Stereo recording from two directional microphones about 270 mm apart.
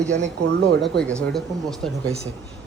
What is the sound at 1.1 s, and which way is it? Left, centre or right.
Speech, centre.